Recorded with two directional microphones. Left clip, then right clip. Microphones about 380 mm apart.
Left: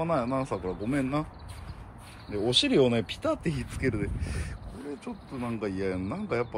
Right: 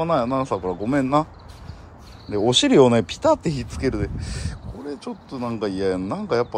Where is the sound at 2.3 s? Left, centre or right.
Right.